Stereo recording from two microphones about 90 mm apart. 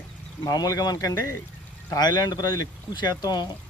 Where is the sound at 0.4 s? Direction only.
45° left (ahead or behind).